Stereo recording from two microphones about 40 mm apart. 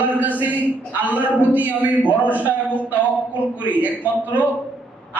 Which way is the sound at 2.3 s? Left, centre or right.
Right.